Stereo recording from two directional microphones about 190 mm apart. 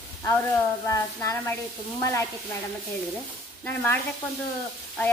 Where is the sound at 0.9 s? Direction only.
15° left (ahead or behind).